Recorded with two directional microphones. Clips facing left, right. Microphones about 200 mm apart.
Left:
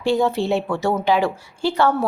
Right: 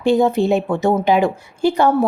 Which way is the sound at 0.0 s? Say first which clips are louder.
Right 4 dB; 20° right (ahead or behind).